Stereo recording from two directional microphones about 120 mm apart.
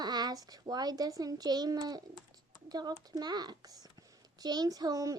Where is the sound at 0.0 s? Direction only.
35° right (ahead or behind).